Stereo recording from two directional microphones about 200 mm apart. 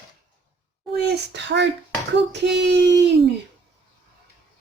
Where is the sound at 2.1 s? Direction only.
60° right (ahead or behind).